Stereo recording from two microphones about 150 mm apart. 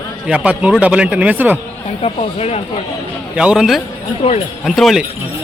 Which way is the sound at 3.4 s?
5° right (ahead or behind).